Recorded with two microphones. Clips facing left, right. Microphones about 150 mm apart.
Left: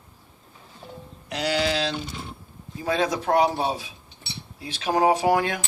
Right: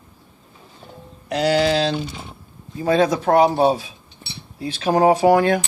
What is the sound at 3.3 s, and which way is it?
Speech, 50° right (ahead or behind).